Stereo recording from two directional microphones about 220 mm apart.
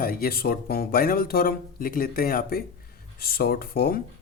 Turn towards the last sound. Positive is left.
turn(degrees=40)  # may be behind; listen again after turning